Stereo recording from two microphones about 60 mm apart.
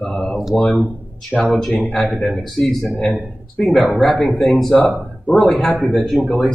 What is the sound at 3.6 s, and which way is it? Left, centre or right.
A man's voice, centre.